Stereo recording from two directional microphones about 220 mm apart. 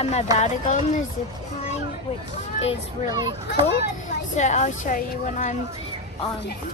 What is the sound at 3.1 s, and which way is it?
Speech, 20° right (ahead or behind).